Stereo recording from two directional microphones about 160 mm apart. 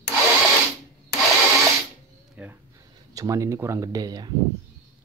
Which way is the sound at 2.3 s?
10° right (ahead or behind).